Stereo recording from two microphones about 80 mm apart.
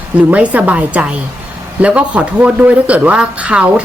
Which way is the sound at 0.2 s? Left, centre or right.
Centre.